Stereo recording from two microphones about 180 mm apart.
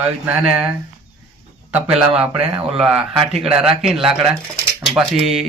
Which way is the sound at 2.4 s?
5° right (ahead or behind).